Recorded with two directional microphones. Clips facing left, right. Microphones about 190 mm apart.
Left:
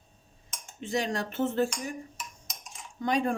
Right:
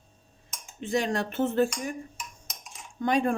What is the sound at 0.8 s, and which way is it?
Speech, 55° right (ahead or behind).